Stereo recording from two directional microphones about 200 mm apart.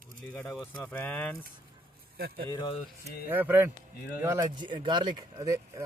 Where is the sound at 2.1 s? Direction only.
50° right (ahead or behind).